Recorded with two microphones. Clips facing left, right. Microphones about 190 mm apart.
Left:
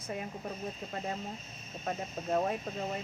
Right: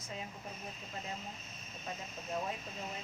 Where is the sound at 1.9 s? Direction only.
60° left (ahead or behind).